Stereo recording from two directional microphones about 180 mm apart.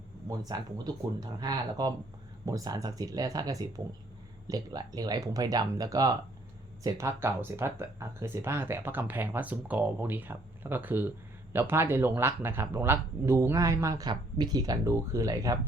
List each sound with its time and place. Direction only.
0.3 s speech: 20° right (ahead or behind)